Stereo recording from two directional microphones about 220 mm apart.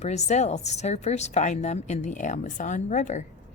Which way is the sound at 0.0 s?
30° left (ahead or behind).